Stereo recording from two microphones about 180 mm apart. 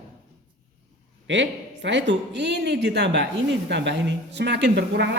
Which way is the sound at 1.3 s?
90° right.